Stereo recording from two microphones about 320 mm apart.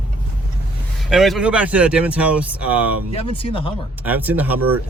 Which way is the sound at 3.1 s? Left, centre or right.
Centre.